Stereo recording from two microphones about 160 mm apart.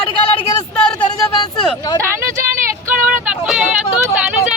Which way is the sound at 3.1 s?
5° right (ahead or behind).